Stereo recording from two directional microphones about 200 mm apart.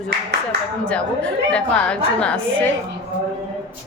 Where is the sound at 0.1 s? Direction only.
55° right (ahead or behind).